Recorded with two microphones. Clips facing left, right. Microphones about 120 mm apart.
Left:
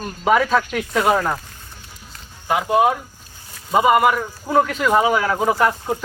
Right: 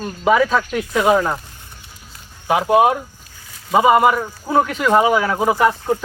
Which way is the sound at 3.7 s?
20° right (ahead or behind).